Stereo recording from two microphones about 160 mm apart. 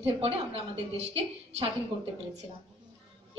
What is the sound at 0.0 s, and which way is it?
A woman's voice, 35° right (ahead or behind).